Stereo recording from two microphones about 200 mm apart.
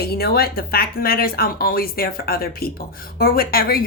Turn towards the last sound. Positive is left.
turn(degrees=50)  # may be behind; listen again after turning